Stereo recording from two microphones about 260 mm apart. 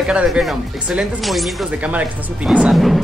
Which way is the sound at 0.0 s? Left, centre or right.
Centre.